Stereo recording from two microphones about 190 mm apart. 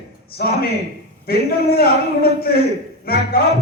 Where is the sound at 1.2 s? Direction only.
55° left (ahead or behind).